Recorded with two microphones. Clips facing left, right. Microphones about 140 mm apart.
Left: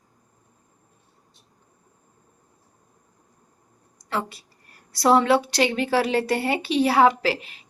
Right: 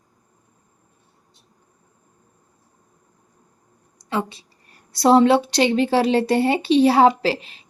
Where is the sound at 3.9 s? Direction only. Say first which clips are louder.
Right 3 dB; 20° right (ahead or behind).